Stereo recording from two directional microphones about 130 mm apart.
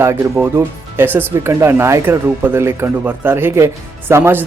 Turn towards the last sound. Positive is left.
turn(degrees=-15)  # may be behind; listen again after turning